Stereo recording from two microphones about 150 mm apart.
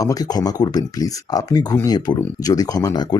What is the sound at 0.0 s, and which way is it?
Speech, 25° left (ahead or behind).